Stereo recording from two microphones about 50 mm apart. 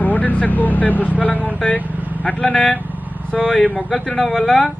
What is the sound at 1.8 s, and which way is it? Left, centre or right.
Vehicle, right.